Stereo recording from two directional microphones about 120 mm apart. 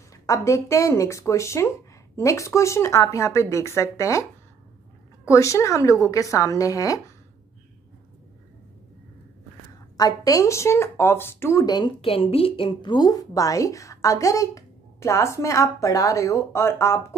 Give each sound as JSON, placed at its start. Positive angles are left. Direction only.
{"t": 0.1, "sound": "a woman's voice", "side_deg": 25}
{"t": 9.9, "sound": "a woman's voice", "side_deg": 30}
{"t": 11.6, "sound": "speech", "side_deg": 35}
{"t": 12.0, "sound": "a woman's voice", "side_deg": 55}